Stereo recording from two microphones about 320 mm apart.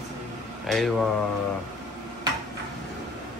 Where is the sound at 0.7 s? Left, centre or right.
Centre.